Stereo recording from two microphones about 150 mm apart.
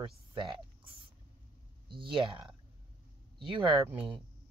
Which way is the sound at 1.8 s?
35° right (ahead or behind).